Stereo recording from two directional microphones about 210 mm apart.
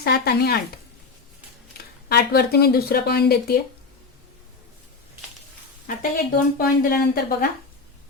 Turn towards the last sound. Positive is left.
turn(degrees=45)  # may be behind; listen again after turning